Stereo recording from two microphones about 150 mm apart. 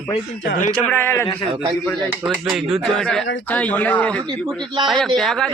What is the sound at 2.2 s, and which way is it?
Speech, centre (ahead or behind).